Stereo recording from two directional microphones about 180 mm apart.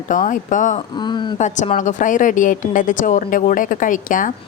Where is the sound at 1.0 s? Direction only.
25° left (ahead or behind).